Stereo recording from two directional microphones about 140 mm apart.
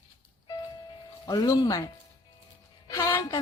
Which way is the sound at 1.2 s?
25° left (ahead or behind).